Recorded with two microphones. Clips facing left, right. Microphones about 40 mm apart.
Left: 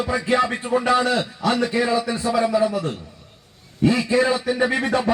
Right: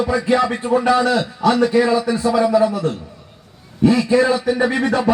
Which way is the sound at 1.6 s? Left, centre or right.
Centre.